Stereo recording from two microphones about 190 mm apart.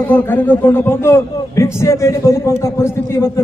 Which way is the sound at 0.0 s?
10° left (ahead or behind).